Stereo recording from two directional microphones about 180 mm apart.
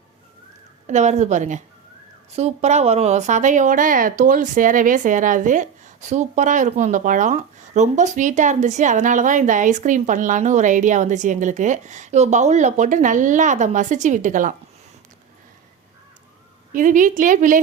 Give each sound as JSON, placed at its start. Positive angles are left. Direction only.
{"t": 0.9, "sound": "a woman's voice", "side_deg": -40}
{"t": 16.7, "sound": "a woman's voice", "side_deg": -45}